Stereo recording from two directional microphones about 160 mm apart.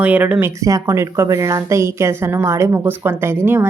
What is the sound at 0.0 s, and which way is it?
A woman's voice, 10° right (ahead or behind).